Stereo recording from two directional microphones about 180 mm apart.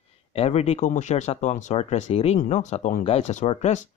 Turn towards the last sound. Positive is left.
turn(degrees=40)  # may be behind; listen again after turning